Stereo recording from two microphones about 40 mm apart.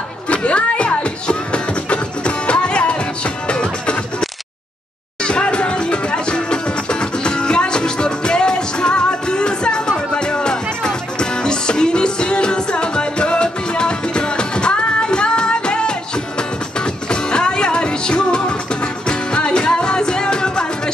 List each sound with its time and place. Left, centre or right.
0.3 s music: left
5.2 s music: left